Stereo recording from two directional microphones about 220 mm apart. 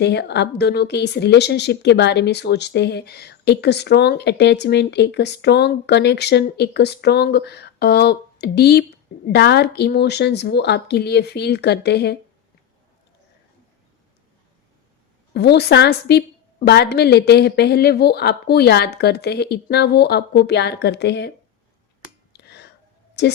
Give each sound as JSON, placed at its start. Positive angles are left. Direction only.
{"t": 0.0, "sound": "speech", "side_deg": 50}
{"t": 15.3, "sound": "speech", "side_deg": 50}
{"t": 22.3, "sound": "a sound", "side_deg": 50}